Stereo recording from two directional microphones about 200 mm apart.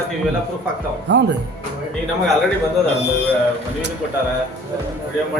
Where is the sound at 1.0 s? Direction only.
60° right (ahead or behind).